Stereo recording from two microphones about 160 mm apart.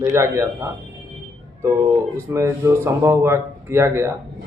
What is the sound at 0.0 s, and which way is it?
Speech, 15° right (ahead or behind).